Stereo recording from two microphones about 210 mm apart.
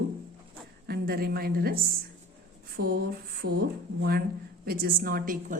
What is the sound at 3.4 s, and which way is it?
Speech, 90° right.